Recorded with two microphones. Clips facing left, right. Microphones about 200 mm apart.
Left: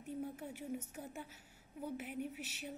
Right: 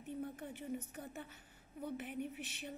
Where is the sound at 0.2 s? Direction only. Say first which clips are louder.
Left 1 dB; 10° left (ahead or behind).